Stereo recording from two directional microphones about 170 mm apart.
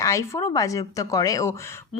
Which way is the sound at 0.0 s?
20° left (ahead or behind).